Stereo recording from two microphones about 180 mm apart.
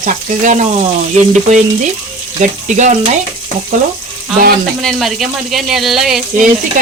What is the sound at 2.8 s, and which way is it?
Speech, 40° right (ahead or behind).